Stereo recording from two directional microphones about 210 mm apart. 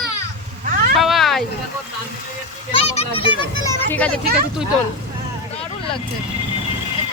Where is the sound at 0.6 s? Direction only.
40° right (ahead or behind).